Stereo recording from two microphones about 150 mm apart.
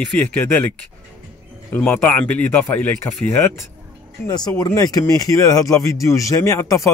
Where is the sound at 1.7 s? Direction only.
15° left (ahead or behind).